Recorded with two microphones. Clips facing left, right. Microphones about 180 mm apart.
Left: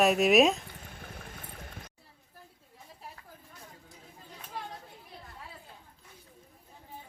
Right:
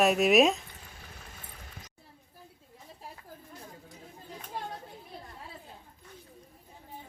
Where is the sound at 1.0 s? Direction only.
55° left (ahead or behind).